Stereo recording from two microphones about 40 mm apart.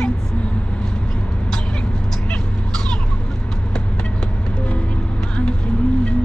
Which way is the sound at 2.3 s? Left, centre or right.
Left.